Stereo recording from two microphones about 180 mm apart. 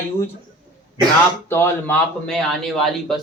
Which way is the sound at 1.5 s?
15° left (ahead or behind).